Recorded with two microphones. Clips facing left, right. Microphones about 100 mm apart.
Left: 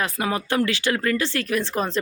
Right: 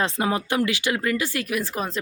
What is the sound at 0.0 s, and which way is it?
Speech, 25° right (ahead or behind).